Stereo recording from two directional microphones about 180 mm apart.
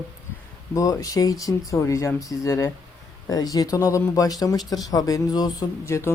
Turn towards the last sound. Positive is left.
turn(degrees=15)  # may be behind; listen again after turning